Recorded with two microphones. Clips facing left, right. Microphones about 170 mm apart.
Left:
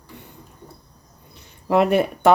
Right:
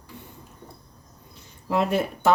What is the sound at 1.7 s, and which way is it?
Speech, 65° left (ahead or behind).